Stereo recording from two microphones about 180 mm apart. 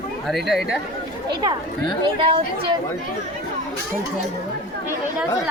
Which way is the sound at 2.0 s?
30° right (ahead or behind).